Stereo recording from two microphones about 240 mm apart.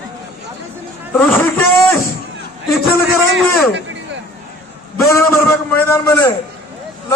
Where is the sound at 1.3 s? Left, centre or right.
Centre.